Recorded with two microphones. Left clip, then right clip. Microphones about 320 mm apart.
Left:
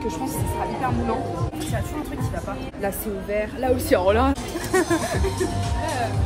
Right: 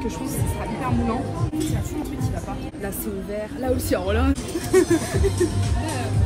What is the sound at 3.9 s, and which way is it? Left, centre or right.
Speech, left.